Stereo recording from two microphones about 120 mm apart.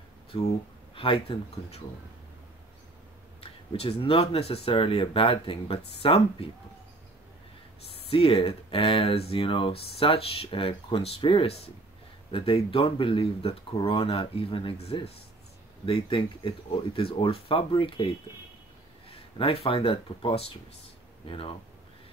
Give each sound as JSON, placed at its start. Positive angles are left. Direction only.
{"t": 0.3, "sound": "speech", "side_deg": 50}
{"t": 3.3, "sound": "speech", "side_deg": 50}
{"t": 7.9, "sound": "speech", "side_deg": 55}
{"t": 19.3, "sound": "speech", "side_deg": 50}